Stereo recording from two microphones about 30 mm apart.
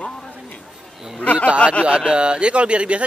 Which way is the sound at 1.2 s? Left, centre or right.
Left.